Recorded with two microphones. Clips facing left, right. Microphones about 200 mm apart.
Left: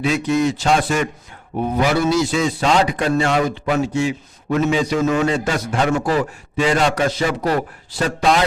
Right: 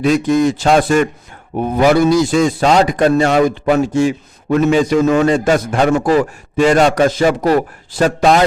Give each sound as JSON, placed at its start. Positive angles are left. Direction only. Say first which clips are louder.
{"t": 0.0, "sound": "a man's voice", "louder": "right 5 dB", "side_deg": -45}